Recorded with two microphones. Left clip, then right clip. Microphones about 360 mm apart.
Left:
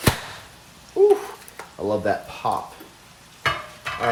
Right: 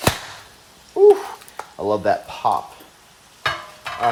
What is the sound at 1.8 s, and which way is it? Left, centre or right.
Speech, right.